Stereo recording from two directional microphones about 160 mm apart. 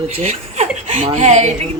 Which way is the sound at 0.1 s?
45° right (ahead or behind).